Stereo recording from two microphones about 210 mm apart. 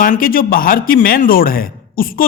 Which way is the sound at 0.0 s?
40° left (ahead or behind).